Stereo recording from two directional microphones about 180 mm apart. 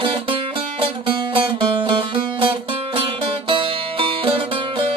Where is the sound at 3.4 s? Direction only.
30° right (ahead or behind).